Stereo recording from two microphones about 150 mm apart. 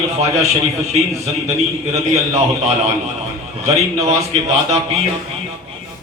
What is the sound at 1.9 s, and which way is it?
A man's voice, 45° right (ahead or behind).